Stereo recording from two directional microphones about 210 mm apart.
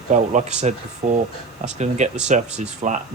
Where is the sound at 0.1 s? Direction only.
35° right (ahead or behind).